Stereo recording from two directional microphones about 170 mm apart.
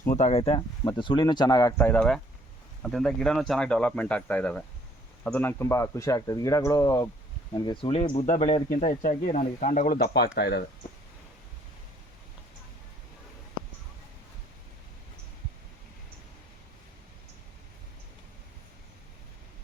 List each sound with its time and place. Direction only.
0.0 s speech: 45° left (ahead or behind); by 1.9 s 20° left (ahead or behind)
1.9 s speech: 5° left (ahead or behind); by 8.6 s 35° left (ahead or behind)
8.7 s speech: 50° left (ahead or behind)
10.0 s speech: 75° left (ahead or behind)